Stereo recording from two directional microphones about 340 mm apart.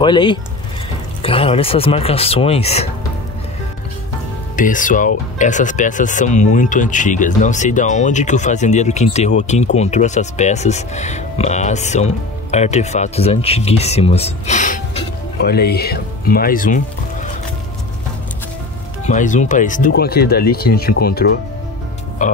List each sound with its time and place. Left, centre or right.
0.0 s speech: centre
4.6 s speech: left
19.0 s speech: left